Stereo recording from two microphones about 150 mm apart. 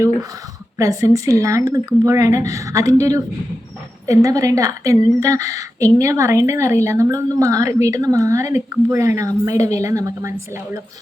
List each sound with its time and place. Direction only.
0.8 s a woman's voice: 20° right (ahead or behind)